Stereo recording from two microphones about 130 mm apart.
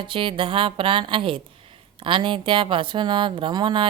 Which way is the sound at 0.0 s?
40° right (ahead or behind).